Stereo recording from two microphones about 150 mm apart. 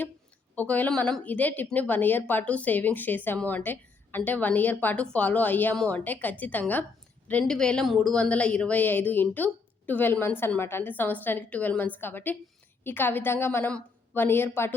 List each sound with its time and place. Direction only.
0.5 s a woman's voice: 10° left (ahead or behind)